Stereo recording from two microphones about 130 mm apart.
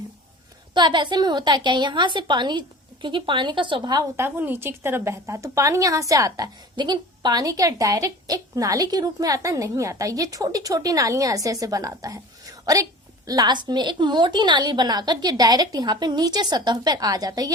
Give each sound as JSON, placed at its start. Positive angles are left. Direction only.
{"t": 0.7, "sound": "a woman's voice", "side_deg": -35}
{"t": 4.2, "sound": "a woman's voice", "side_deg": -15}